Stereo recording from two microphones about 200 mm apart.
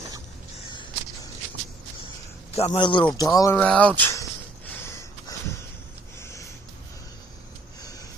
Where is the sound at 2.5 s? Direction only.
30° left (ahead or behind).